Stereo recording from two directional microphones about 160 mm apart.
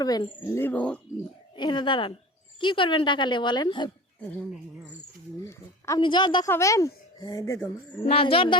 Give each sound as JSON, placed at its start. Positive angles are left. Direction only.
{"t": 0.0, "sound": "a child's voice", "side_deg": 25}
{"t": 0.4, "sound": "speech", "side_deg": 15}
{"t": 1.5, "sound": "speech", "side_deg": 30}
{"t": 5.5, "sound": "speech", "side_deg": 15}
{"t": 6.0, "sound": "a child's voice", "side_deg": 30}
{"t": 8.0, "sound": "speech", "side_deg": 35}